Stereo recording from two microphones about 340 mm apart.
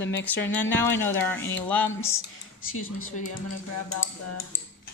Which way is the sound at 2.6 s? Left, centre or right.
Left.